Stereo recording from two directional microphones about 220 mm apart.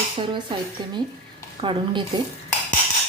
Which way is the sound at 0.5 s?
20° right (ahead or behind).